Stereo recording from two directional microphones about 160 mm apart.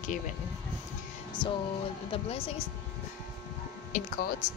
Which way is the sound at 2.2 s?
35° left (ahead or behind).